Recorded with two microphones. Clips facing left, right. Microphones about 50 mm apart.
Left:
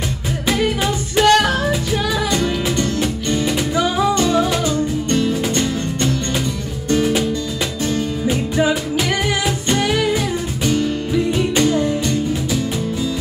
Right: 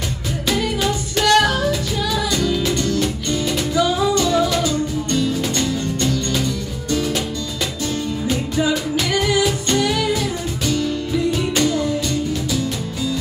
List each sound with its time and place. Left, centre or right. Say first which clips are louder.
1.1 s music: left 2 dB; left
2.4 s music: left 1 dB; left
3.0 s music: left 2 dB; left